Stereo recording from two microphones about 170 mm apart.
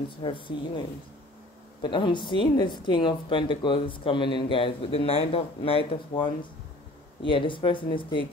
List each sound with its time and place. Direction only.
0.2 s speech: 30° left (ahead or behind)